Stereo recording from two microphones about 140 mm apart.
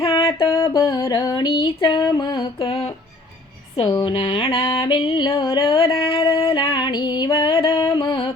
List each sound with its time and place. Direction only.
0.3 s a sound: 25° left (ahead or behind); by 2.9 s 40° left (ahead or behind)
3.8 s music: 35° left (ahead or behind)
5.7 s female singing: 40° left (ahead or behind)